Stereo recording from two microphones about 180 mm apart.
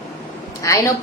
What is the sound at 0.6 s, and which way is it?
Speech, 15° left (ahead or behind).